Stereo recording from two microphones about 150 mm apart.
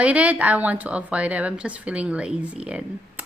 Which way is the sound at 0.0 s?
10° right (ahead or behind).